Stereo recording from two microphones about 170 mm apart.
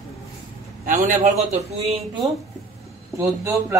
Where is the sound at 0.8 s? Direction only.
50° right (ahead or behind).